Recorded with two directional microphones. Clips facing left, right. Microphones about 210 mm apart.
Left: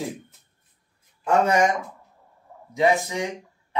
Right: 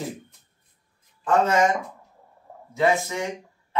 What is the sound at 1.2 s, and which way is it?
Speech, 15° left (ahead or behind).